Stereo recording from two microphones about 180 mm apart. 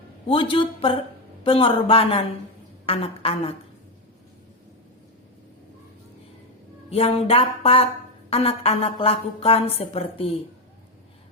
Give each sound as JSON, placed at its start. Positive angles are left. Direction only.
{"t": 0.3, "sound": "a woman's voice", "side_deg": 30}
{"t": 6.9, "sound": "a woman's voice", "side_deg": 35}